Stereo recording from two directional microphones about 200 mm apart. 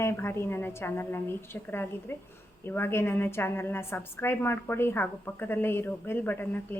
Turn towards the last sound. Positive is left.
turn(degrees=10)  # may be behind; listen again after turning